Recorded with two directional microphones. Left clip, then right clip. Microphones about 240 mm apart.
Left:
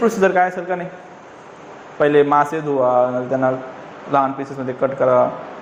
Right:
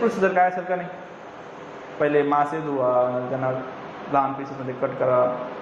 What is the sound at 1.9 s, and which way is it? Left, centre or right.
A man's voice, left.